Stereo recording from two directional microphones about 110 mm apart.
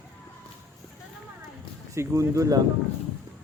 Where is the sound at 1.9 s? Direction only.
30° right (ahead or behind).